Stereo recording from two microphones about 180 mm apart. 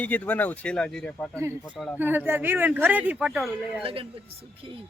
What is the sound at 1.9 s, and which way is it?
A woman's voice, 10° right (ahead or behind).